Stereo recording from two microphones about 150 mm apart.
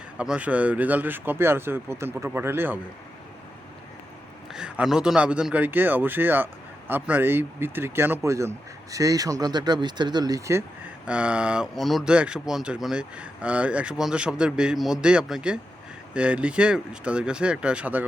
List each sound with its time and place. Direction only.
0.2 s speech: 10° right (ahead or behind)
4.5 s speech: 5° right (ahead or behind); by 10.6 s 20° right (ahead or behind)
11.0 s speech: 10° right (ahead or behind)